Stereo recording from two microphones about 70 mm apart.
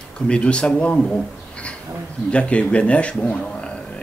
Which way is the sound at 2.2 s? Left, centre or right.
Centre.